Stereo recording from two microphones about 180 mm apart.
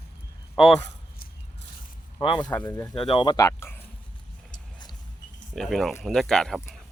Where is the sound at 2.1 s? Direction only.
25° left (ahead or behind).